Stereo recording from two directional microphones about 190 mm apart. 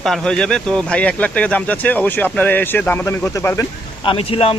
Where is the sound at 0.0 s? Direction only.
Centre (ahead or behind).